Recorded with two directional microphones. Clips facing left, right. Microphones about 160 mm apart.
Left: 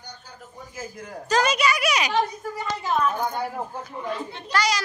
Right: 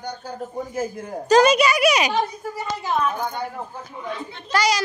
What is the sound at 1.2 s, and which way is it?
A woman's voice, 20° right (ahead or behind).